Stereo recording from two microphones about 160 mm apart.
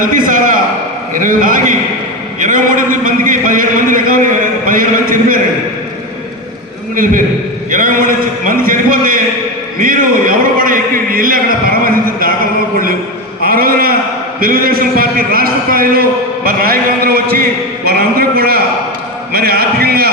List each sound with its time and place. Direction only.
0.0 s a man's voice: 55° right (ahead or behind)
6.9 s a man's voice: 55° right (ahead or behind)
13.4 s a sound: 70° right (ahead or behind)
14.4 s a man's voice: 65° right (ahead or behind)